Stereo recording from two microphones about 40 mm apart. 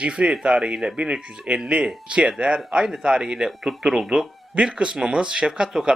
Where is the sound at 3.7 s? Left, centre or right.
Centre.